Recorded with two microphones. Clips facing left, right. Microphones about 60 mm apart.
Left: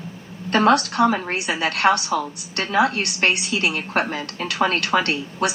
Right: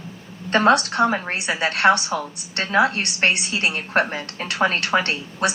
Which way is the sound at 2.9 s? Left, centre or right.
Right.